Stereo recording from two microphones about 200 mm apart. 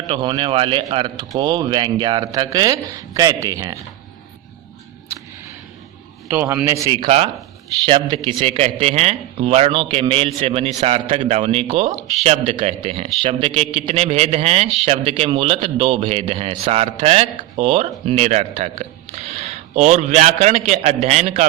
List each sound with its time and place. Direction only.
0.1 s a man's voice: 25° right (ahead or behind)
6.2 s a man's voice: 10° right (ahead or behind); by 21.4 s 35° right (ahead or behind)